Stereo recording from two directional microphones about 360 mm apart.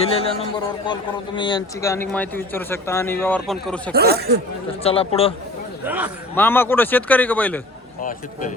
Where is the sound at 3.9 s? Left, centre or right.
Right.